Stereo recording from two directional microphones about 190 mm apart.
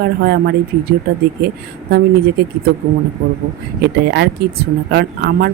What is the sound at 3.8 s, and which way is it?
Speech, 60° right (ahead or behind).